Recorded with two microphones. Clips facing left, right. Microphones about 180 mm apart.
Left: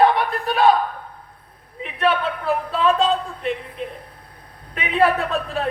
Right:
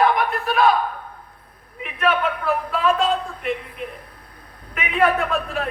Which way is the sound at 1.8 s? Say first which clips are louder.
Even; 35° left (ahead or behind).